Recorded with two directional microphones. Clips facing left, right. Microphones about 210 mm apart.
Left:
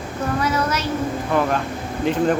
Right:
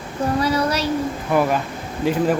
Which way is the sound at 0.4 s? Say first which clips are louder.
Right 2 dB; 35° right (ahead or behind).